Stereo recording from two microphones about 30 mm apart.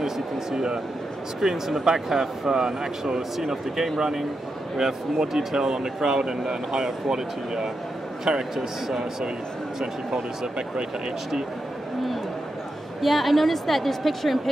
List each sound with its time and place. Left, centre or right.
0.0 s speech: centre
9.8 s speech: right
13.0 s a woman's voice: centre